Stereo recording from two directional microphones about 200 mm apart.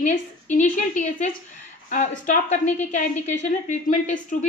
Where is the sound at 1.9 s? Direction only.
40° left (ahead or behind).